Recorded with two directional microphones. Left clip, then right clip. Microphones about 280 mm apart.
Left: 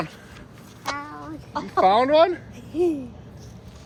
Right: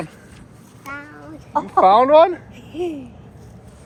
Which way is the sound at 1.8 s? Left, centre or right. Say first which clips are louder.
Right 5 dB; centre.